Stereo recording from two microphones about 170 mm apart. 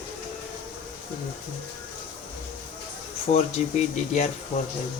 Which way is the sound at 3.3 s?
45° left (ahead or behind).